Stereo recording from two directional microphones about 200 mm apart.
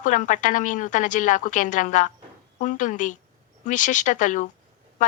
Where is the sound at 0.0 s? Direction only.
40° left (ahead or behind).